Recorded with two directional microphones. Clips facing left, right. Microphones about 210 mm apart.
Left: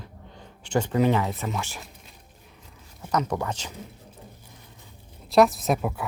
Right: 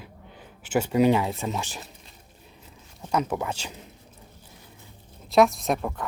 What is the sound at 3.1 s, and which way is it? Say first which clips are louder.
Speech: even; 10° right (ahead or behind).